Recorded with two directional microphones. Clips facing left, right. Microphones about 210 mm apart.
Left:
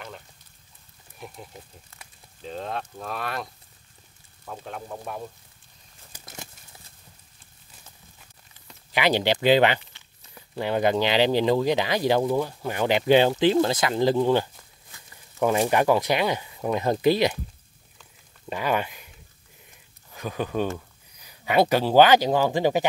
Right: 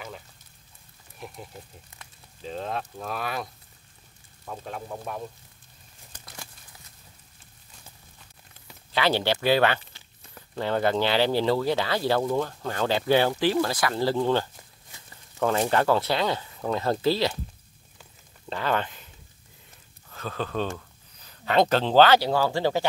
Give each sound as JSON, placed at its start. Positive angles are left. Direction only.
{"t": 1.2, "sound": "speech", "side_deg": 0}
{"t": 4.5, "sound": "speech", "side_deg": 0}
{"t": 6.2, "sound": "a sound", "side_deg": 20}
{"t": 8.9, "sound": "speech", "side_deg": 15}
{"t": 18.5, "sound": "speech", "side_deg": 10}
{"t": 20.1, "sound": "speech", "side_deg": 15}